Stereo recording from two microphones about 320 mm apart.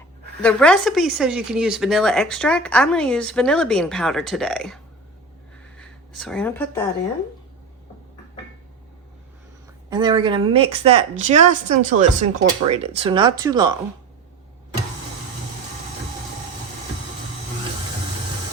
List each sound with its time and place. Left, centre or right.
0.4 s speech: centre
9.9 s speech: centre